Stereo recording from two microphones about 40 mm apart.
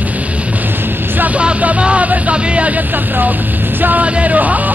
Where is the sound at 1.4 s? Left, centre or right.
Right.